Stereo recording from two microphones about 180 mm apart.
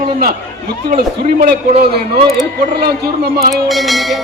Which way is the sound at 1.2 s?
50° right (ahead or behind).